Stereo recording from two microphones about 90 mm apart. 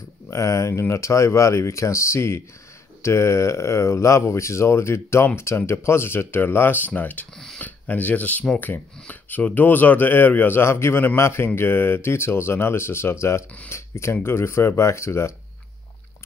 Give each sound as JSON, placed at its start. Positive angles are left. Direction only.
{"t": 0.3, "sound": "speech", "side_deg": 35}
{"t": 7.3, "sound": "speech", "side_deg": 5}
{"t": 7.6, "sound": "speech", "side_deg": 20}